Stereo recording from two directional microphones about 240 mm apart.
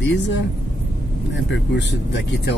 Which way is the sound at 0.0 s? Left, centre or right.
Left.